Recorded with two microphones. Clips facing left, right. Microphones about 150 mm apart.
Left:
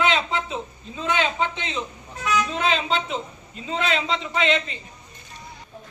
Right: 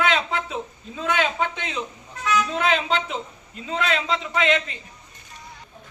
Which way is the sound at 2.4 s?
5° right (ahead or behind).